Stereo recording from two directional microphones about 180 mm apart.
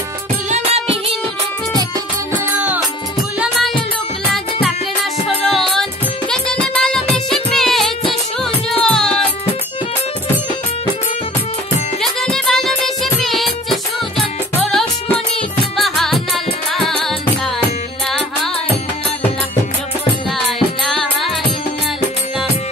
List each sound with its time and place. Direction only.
0.5 s music: 35° right (ahead or behind)
3.3 s music: centre (ahead or behind)
5.5 s music: centre (ahead or behind)
12.0 s music: centre (ahead or behind)
20.2 s music: centre (ahead or behind)